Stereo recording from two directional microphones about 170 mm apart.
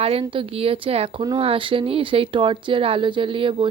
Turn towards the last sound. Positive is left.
turn(degrees=-30)  # may be behind; listen again after turning